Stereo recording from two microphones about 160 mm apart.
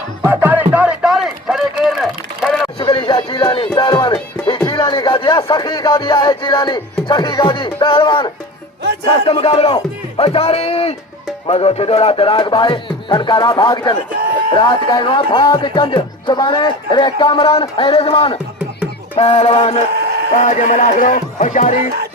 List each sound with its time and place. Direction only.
0.2 s music: 15° right (ahead or behind)
2.7 s music: 35° left (ahead or behind)
9.0 s speech: 35° left (ahead or behind)
19.1 s music: 30° left (ahead or behind)
19.4 s speech: 45° left (ahead or behind)
19.9 s a sound: 90° right
20.3 s speech: 50° left (ahead or behind)